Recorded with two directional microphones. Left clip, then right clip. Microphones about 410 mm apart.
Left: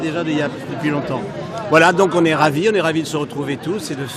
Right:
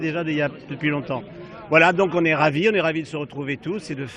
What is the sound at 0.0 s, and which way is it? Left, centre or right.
A man's voice, right.